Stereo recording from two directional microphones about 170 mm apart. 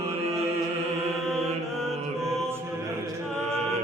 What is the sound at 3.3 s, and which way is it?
A capella, 5° left (ahead or behind).